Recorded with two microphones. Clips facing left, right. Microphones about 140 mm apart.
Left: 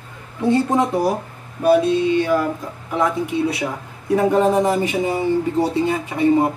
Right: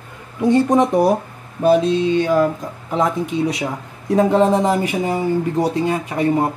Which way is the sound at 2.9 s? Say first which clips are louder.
Right 1 dB; 20° right (ahead or behind).